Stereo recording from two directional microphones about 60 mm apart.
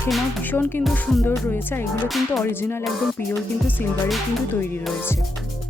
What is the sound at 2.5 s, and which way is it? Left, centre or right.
Speech, left.